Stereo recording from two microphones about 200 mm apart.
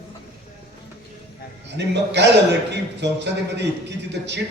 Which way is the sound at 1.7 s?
60° right (ahead or behind).